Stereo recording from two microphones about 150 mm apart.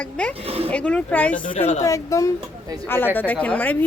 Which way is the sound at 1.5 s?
45° left (ahead or behind).